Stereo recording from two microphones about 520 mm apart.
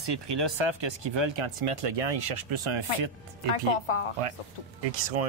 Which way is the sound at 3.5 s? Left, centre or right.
Left.